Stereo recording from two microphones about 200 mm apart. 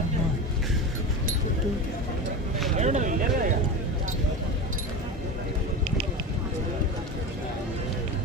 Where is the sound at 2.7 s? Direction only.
35° right (ahead or behind).